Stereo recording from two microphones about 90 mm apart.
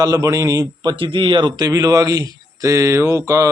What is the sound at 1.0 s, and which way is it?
Speech, 70° right (ahead or behind).